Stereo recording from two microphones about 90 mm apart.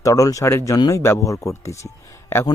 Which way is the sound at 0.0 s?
40° left (ahead or behind).